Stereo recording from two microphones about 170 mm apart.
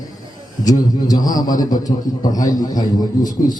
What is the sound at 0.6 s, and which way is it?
A man's voice, 20° left (ahead or behind).